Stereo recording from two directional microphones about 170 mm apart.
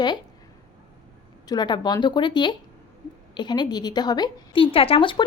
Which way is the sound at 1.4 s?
25° left (ahead or behind).